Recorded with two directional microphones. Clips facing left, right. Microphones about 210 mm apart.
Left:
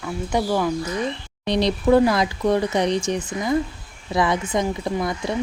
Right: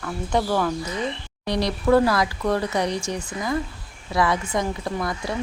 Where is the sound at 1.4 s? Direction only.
20° left (ahead or behind).